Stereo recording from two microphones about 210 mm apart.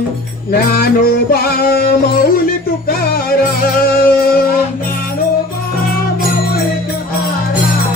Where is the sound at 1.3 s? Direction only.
45° left (ahead or behind).